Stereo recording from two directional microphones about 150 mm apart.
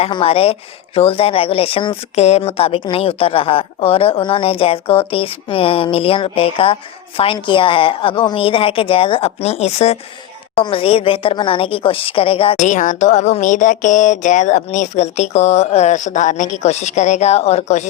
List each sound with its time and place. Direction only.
0.0 s a woman's voice: 40° left (ahead or behind)
12.5 s speech: 55° left (ahead or behind)